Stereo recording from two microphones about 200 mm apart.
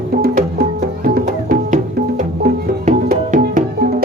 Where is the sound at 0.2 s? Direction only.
45° right (ahead or behind).